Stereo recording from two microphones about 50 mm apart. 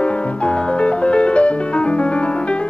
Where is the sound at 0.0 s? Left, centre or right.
Left.